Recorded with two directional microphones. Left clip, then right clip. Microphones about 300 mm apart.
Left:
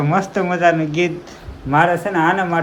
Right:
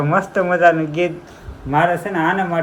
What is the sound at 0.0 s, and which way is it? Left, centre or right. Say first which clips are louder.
Speech: right 1 dB; centre.